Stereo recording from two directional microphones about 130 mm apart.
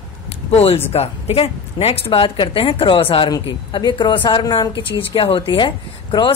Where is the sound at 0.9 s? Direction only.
50° left (ahead or behind).